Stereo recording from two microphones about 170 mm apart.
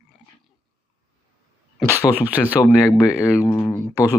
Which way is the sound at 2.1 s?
25° left (ahead or behind).